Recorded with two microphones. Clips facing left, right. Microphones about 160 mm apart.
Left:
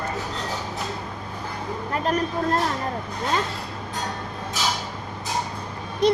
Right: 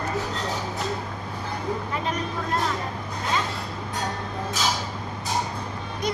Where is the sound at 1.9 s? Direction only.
50° left (ahead or behind).